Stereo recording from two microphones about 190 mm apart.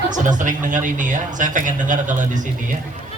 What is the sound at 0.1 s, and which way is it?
Speech, 40° right (ahead or behind).